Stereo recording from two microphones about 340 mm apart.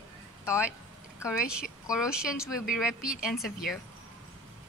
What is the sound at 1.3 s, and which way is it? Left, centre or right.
Speech, centre.